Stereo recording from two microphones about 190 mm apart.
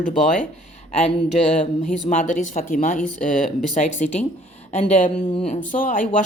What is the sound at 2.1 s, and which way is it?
Speech, 40° left (ahead or behind).